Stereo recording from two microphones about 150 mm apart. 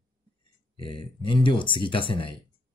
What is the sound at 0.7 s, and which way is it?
Speech, 35° left (ahead or behind).